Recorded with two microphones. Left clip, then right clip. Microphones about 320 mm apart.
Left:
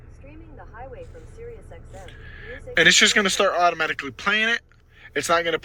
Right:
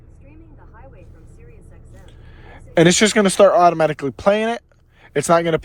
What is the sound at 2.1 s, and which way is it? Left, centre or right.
Speech, centre.